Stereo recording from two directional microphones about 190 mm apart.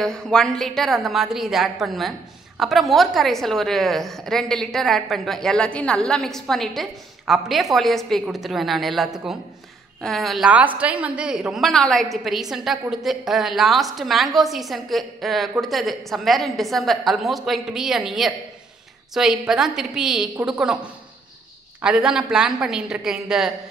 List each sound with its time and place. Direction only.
0.0 s a woman's voice: 5° left (ahead or behind)